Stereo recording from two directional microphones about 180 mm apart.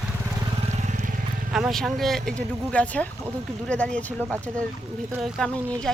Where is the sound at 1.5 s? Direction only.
Centre (ahead or behind).